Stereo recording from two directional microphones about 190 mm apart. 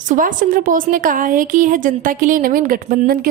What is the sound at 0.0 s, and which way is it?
A woman's voice, 45° right (ahead or behind).